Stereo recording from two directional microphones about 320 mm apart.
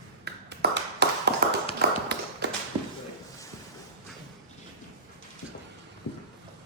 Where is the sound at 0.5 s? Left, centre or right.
Right.